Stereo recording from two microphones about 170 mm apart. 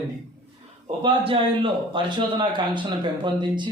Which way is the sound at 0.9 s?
30° right (ahead or behind).